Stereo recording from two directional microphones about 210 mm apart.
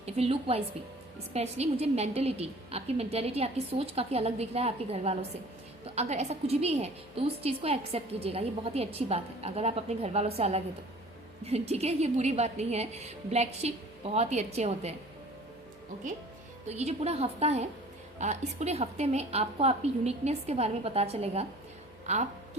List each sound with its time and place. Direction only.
0.0 s a woman's voice: 30° right (ahead or behind)
16.6 s a woman's voice: 30° right (ahead or behind)